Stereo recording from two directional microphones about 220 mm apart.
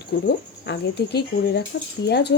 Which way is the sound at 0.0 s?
50° left (ahead or behind).